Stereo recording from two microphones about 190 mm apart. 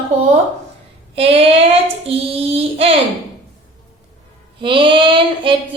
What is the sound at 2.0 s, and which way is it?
Child singing, 30° right (ahead or behind).